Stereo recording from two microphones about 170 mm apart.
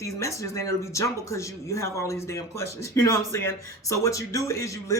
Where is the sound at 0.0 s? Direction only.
20° left (ahead or behind).